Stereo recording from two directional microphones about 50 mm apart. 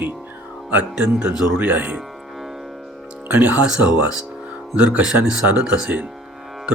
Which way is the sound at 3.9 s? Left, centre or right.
Centre.